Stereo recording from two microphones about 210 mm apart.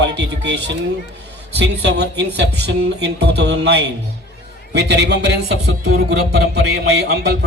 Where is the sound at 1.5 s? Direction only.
55° right (ahead or behind).